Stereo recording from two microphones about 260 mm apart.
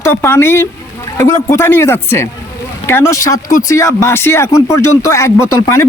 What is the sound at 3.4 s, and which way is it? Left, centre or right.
Speech, left.